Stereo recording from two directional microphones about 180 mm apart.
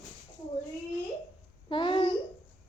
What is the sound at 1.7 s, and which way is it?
Speech, 25° left (ahead or behind).